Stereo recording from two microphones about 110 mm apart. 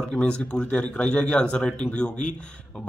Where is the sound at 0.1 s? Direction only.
10° left (ahead or behind).